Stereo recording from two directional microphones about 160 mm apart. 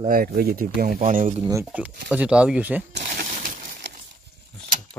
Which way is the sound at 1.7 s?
10° right (ahead or behind).